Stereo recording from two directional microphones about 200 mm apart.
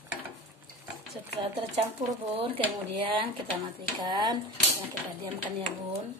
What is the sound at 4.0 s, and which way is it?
Speech, 20° right (ahead or behind).